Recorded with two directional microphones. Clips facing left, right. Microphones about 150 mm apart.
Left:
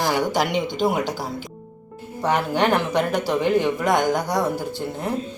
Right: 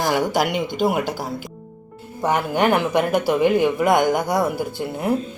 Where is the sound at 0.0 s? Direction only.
5° right (ahead or behind).